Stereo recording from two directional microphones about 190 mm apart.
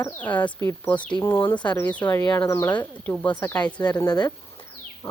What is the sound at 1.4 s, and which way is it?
Speech, 25° left (ahead or behind).